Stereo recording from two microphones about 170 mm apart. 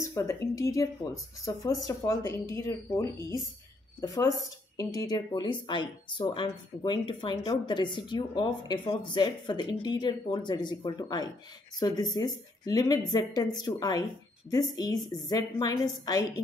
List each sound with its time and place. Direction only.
0.0 s speech: 15° left (ahead or behind)